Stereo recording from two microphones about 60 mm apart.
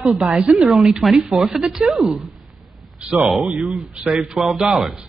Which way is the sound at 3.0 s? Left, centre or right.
Centre.